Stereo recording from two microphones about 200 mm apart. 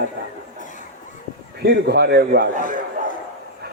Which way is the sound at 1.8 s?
55° right (ahead or behind).